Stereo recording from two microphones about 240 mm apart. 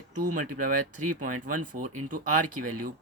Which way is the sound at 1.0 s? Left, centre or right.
Right.